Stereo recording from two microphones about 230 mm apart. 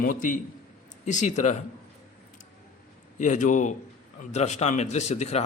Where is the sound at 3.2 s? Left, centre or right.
Left.